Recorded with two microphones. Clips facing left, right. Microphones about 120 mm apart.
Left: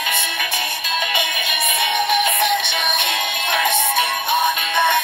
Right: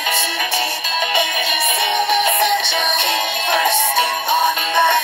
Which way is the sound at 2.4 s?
15° left (ahead or behind).